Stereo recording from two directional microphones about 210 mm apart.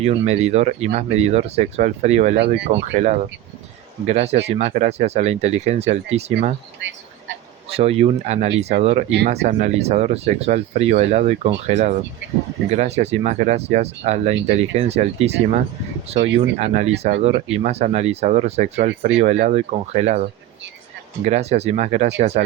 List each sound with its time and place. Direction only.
0.0 s speech: 30° right (ahead or behind)
4.0 s speech: 30° right (ahead or behind)
7.7 s speech: 30° right (ahead or behind)
9.0 s speech: 55° right (ahead or behind)
9.3 s speech: 30° right (ahead or behind)
21.2 s speech: 30° right (ahead or behind)